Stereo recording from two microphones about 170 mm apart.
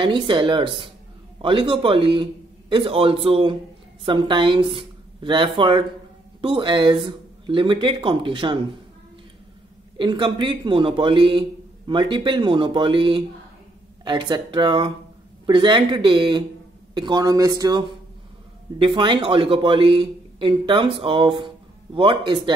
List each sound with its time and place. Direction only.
0.0 s a woman's voice: 30° right (ahead or behind)
9.9 s speech: 30° right (ahead or behind)